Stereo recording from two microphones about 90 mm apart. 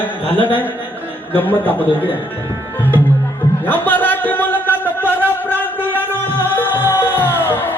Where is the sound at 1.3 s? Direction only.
20° left (ahead or behind).